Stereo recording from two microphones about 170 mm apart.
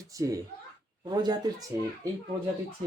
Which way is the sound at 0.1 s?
20° right (ahead or behind).